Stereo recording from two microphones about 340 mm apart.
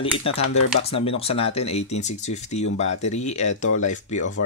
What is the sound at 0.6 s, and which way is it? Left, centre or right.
Speech, centre.